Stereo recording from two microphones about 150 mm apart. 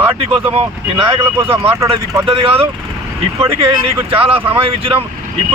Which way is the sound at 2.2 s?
40° right (ahead or behind).